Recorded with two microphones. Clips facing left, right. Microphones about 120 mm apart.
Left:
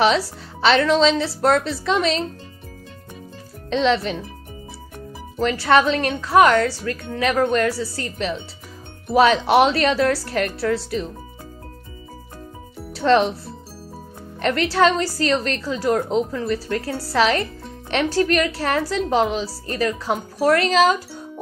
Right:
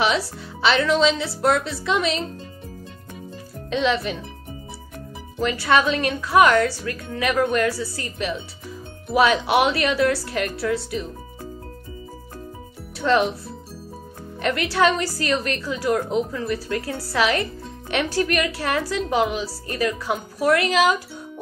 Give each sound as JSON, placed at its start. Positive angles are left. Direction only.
{"t": 0.0, "sound": "speech", "side_deg": 35}
{"t": 3.7, "sound": "speech", "side_deg": 35}
{"t": 5.4, "sound": "speech", "side_deg": 40}
{"t": 13.0, "sound": "speech", "side_deg": 35}
{"t": 14.4, "sound": "speech", "side_deg": 40}